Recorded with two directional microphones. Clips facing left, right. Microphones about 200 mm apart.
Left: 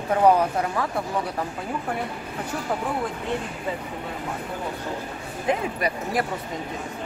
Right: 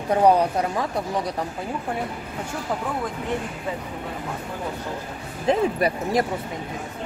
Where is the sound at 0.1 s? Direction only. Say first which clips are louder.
Right 1 dB; 15° right (ahead or behind).